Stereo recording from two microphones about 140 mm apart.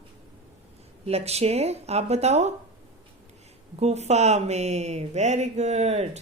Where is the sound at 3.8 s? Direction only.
50° right (ahead or behind).